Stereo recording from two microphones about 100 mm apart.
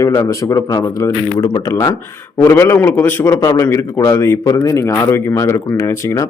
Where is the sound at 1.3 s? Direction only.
50° left (ahead or behind).